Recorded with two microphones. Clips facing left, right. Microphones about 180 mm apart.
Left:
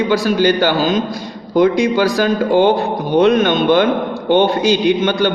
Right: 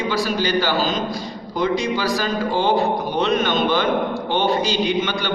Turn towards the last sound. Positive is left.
turn(degrees=50)  # may be behind; listen again after turning